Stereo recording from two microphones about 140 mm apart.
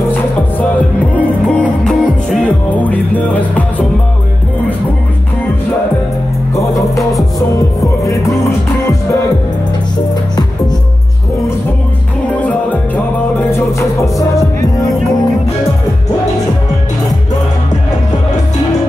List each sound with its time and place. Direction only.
0.1 s music: 10° left (ahead or behind)
6.5 s music: 25° left (ahead or behind)
8.5 s music: 20° left (ahead or behind)
12.3 s music: 10° left (ahead or behind)